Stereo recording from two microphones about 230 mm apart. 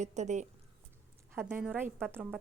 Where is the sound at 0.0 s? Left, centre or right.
Right.